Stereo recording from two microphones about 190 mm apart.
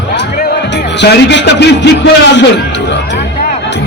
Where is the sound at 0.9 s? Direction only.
65° left (ahead or behind).